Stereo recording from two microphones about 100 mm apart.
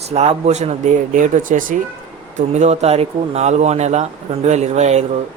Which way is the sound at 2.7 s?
90° right.